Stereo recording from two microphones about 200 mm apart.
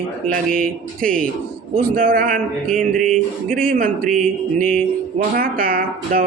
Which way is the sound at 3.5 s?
40° right (ahead or behind).